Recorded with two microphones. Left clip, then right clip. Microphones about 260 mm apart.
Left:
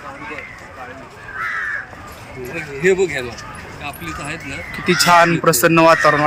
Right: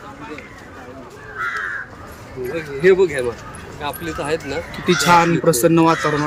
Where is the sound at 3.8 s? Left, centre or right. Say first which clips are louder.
Right 4 dB; right.